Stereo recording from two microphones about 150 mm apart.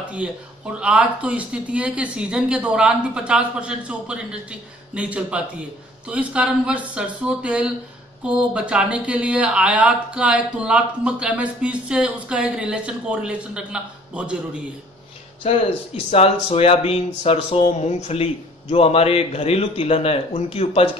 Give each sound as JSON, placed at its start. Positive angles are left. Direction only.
{"t": 0.7, "sound": "speech", "side_deg": -10}
{"t": 15.4, "sound": "speech", "side_deg": 45}